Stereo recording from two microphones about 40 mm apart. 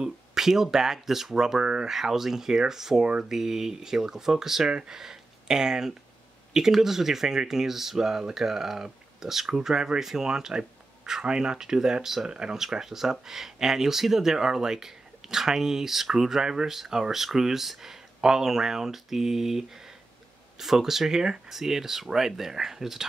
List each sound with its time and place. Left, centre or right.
0.0 s speech: centre
2.0 s speech: centre
12.6 s speech: centre
16.7 s speech: centre